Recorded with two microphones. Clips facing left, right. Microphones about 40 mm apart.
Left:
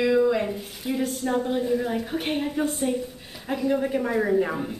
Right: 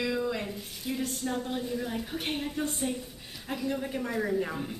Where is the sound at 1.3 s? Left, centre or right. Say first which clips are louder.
Left 10 dB; centre.